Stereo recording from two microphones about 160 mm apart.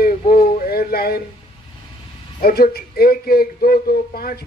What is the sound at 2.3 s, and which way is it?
Speech, 70° left (ahead or behind).